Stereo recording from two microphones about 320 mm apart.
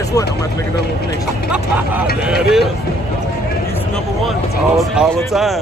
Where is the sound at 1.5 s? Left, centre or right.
Centre.